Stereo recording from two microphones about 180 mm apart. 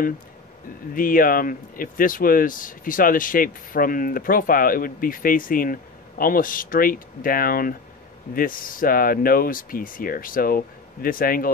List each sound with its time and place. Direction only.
0.9 s speech: 50° left (ahead or behind)